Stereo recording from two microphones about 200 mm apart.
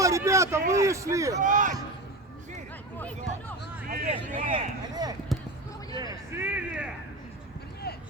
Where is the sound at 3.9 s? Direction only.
35° right (ahead or behind).